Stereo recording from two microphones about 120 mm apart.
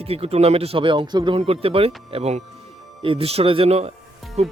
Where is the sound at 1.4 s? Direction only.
55° right (ahead or behind).